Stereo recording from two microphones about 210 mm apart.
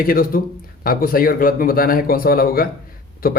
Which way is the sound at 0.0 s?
45° left (ahead or behind).